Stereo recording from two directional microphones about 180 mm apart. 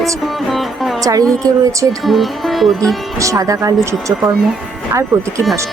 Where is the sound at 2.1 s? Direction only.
Centre (ahead or behind).